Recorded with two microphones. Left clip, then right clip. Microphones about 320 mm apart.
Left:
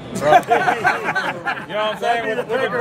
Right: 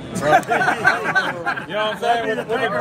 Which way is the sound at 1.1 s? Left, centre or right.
Centre.